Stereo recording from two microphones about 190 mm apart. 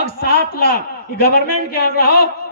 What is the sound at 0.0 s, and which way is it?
A man's voice, 55° left (ahead or behind).